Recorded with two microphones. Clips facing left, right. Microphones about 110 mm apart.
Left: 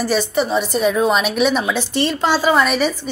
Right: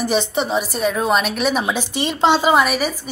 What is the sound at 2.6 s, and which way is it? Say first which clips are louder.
Speech: left 3 dB; 5° right (ahead or behind).